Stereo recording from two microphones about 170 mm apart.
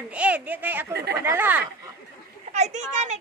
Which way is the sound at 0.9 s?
70° right (ahead or behind).